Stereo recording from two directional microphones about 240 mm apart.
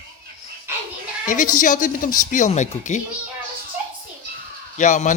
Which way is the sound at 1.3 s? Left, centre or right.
Left.